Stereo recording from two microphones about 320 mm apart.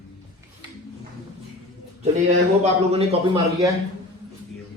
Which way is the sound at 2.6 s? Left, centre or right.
Centre.